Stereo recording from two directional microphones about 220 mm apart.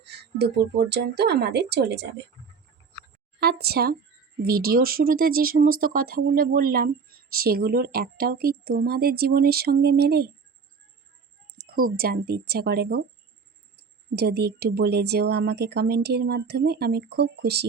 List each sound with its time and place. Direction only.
0.0 s speech: 50° right (ahead or behind)
3.4 s speech: 45° right (ahead or behind)
11.4 s speech: 45° right (ahead or behind)